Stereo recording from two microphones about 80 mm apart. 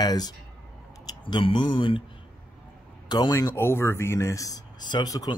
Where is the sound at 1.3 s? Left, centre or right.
Left.